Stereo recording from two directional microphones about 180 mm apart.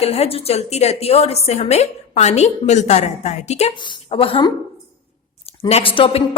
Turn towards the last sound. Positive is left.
turn(degrees=30)  # may be behind; listen again after turning